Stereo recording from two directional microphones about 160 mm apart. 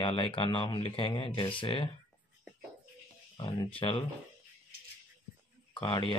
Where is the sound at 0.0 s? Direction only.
30° left (ahead or behind).